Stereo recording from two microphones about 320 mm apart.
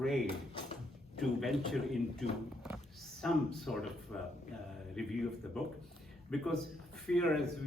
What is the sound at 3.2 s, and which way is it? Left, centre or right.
A man's voice, centre.